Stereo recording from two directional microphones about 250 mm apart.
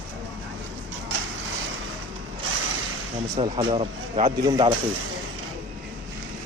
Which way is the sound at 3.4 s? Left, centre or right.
Right.